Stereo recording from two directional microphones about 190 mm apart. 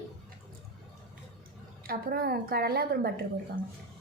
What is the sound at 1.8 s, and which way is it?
A woman's voice, 55° right (ahead or behind).